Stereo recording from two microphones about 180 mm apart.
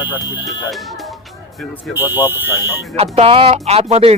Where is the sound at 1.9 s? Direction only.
10° right (ahead or behind).